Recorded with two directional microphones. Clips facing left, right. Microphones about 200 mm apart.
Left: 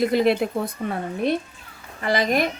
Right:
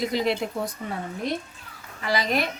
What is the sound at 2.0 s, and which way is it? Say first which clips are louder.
Speech: left 4 dB; 50° left (ahead or behind).